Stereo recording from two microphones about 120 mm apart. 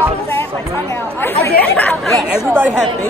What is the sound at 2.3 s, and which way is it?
Speech, 15° right (ahead or behind).